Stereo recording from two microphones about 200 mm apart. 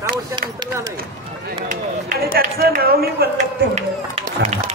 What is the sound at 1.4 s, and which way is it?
Speech, 45° right (ahead or behind).